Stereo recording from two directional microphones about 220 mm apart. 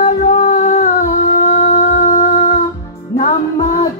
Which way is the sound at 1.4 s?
30° left (ahead or behind).